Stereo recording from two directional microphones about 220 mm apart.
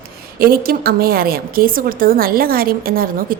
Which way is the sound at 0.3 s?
45° right (ahead or behind).